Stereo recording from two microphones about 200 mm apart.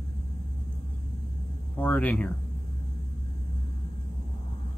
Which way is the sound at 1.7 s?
5° left (ahead or behind).